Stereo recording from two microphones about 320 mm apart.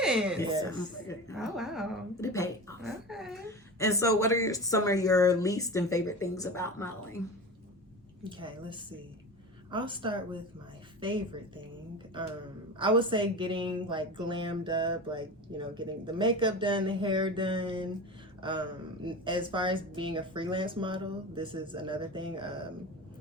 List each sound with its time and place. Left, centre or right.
0.0 s speech: centre
0.6 s speech: centre
1.4 s speech: centre
2.2 s a sound: centre
3.1 s a woman's voice: centre
8.2 s speech: centre
12.8 s speech: centre